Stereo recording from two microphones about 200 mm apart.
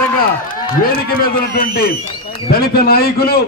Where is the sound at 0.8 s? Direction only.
45° left (ahead or behind).